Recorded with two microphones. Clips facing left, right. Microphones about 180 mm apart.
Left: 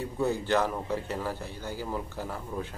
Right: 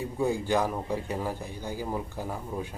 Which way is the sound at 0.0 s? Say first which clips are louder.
Right 1 dB; 10° right (ahead or behind).